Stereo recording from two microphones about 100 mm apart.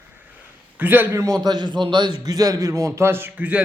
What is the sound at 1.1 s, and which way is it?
A man's voice, 35° right (ahead or behind).